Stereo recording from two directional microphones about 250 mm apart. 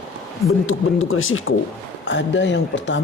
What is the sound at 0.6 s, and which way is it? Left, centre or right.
Speech, left.